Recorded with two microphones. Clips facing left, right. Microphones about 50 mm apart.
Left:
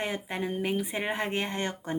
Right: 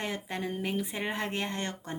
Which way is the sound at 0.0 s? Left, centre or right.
Centre.